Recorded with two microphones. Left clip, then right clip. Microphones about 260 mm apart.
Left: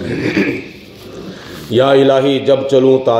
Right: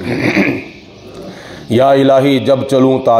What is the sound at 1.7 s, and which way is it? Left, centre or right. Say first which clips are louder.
A man's voice: right 1 dB; right.